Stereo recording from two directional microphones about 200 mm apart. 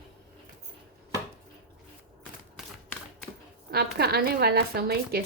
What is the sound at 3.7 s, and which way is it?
A woman's voice, 50° right (ahead or behind).